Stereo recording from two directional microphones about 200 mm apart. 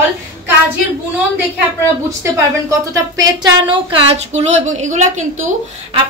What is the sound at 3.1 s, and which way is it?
Speech, 20° right (ahead or behind).